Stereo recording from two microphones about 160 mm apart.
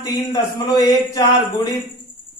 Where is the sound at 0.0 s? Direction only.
25° left (ahead or behind).